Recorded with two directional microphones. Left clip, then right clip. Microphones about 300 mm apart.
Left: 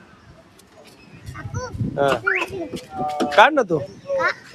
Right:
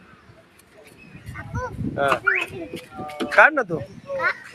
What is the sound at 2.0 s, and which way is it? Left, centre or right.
Speech, centre.